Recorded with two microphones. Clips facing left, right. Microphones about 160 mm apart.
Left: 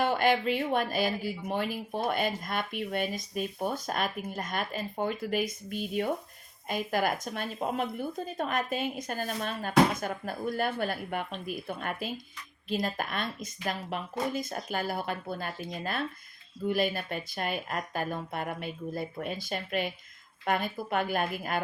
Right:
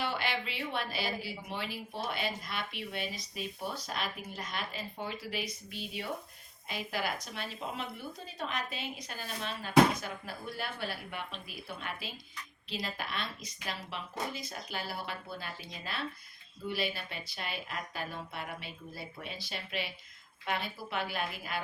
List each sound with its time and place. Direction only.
0.0 s speech: 50° left (ahead or behind)